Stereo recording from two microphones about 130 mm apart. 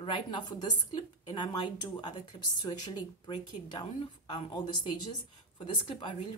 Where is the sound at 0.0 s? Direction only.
35° left (ahead or behind).